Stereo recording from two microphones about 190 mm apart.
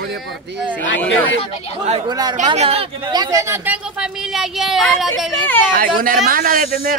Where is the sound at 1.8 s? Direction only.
20° right (ahead or behind).